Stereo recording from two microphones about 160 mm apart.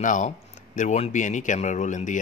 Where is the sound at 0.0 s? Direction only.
55° left (ahead or behind).